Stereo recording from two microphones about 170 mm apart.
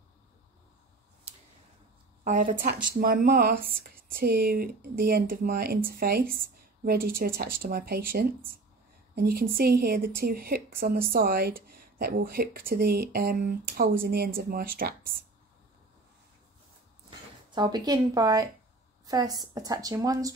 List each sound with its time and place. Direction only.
2.2 s a woman's voice: 50° right (ahead or behind)
17.5 s a woman's voice: 25° right (ahead or behind)